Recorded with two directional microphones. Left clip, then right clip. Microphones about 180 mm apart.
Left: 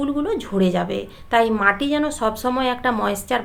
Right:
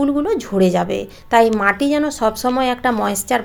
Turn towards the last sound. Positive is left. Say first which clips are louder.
# right 3 dB
turn(degrees=-25)  # may be behind; listen again after turning